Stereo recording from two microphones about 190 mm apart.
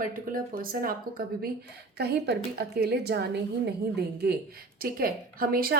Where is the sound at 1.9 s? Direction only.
60° right (ahead or behind).